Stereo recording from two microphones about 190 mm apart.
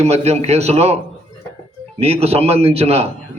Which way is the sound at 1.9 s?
30° right (ahead or behind).